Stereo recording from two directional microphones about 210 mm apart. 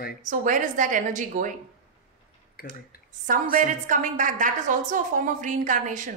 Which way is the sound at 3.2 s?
40° right (ahead or behind).